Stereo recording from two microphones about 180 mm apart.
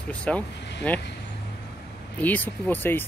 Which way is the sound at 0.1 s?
5° left (ahead or behind).